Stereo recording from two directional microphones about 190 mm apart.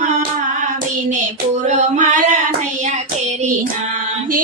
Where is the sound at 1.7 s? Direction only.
40° right (ahead or behind).